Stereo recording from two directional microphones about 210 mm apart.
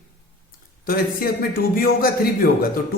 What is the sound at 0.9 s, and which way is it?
A man's voice, 45° left (ahead or behind).